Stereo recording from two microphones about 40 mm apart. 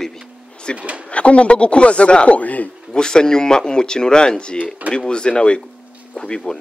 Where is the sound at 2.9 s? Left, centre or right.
Centre.